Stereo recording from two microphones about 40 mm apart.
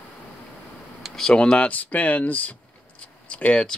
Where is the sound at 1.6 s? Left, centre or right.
Left.